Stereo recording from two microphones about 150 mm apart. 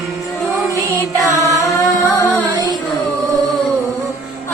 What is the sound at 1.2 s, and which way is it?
Music, 20° left (ahead or behind).